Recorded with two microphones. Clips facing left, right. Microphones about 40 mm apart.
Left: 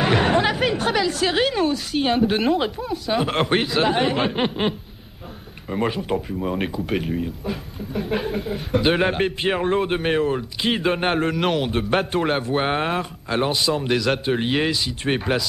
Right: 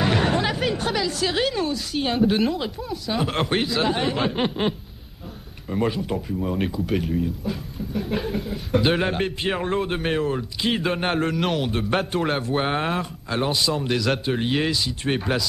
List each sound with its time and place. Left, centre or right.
0.0 s chatter: left
0.5 s a sound: centre
0.9 s a woman's voice: centre